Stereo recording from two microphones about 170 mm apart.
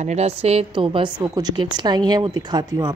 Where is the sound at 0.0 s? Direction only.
40° right (ahead or behind).